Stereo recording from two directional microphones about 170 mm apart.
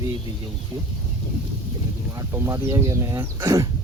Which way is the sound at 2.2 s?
15° right (ahead or behind).